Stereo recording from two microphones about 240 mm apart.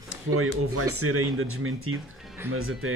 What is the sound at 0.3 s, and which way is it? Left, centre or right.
Speech, right.